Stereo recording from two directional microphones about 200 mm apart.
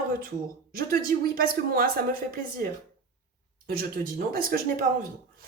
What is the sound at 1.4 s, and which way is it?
Speech, 45° right (ahead or behind).